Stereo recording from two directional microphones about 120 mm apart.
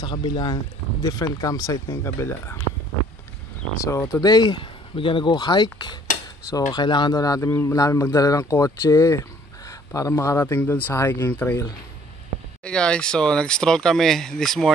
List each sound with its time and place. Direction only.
0.0 s speech: 40° left (ahead or behind)
1.0 s speech: 30° left (ahead or behind)
3.8 s speech: 25° left (ahead or behind)
12.6 s speech: 5° left (ahead or behind)